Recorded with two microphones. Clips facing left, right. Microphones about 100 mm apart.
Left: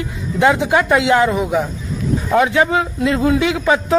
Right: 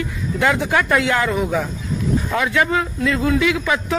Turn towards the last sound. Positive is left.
turn(degrees=30)  # may be behind; listen again after turning